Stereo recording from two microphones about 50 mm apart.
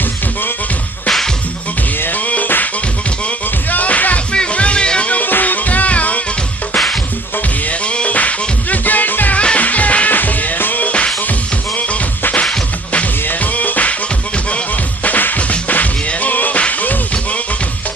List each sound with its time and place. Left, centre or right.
2.0 s music: left
3.7 s music: left
6.7 s music: centre
7.7 s music: left
9.4 s music: left
13.2 s music: left
15.0 s music: left